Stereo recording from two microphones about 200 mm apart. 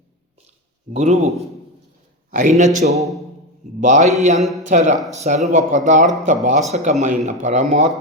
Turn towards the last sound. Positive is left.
turn(degrees=-40)  # may be behind; listen again after turning